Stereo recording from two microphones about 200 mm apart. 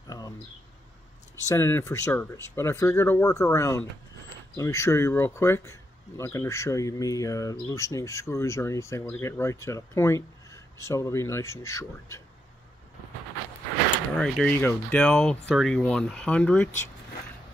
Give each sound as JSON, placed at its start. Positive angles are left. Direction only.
{"t": 0.0, "sound": "a sound", "side_deg": 20}
{"t": 1.5, "sound": "speech", "side_deg": 15}
{"t": 14.1, "sound": "speech", "side_deg": 0}